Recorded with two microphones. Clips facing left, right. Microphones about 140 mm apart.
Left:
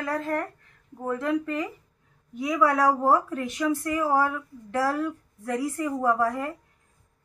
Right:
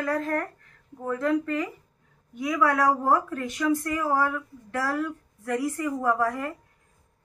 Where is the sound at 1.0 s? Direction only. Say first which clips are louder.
Right 1 dB; 20° left (ahead or behind).